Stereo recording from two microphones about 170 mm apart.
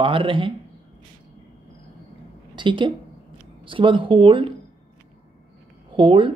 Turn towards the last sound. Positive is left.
turn(degrees=-30)  # may be behind; listen again after turning